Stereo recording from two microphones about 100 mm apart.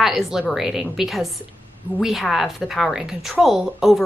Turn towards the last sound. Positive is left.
turn(degrees=0)  # may be behind; listen again after turning